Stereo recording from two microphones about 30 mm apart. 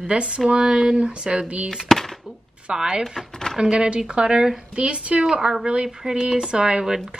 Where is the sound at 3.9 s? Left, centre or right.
Right.